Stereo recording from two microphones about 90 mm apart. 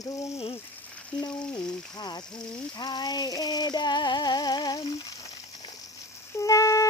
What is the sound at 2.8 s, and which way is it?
Music, 50° left (ahead or behind).